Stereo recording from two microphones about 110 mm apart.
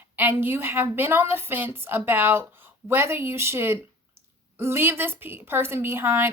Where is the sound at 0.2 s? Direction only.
20° right (ahead or behind).